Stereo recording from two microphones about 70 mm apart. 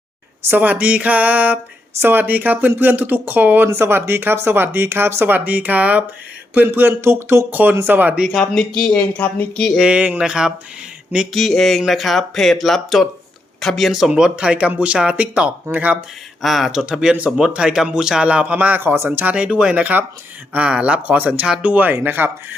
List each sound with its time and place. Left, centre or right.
0.4 s speech: right
8.4 s speech: centre
9.0 s speech: left
9.7 s a man's voice: centre
11.3 s speech: centre
14.1 s a man's voice: centre
16.4 s a man's voice: centre; by 22.5 s right